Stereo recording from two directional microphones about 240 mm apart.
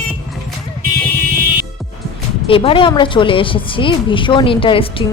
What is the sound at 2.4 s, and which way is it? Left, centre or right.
A woman's voice, left.